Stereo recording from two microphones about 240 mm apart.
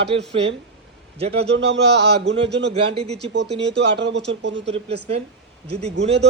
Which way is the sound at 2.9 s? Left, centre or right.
Right.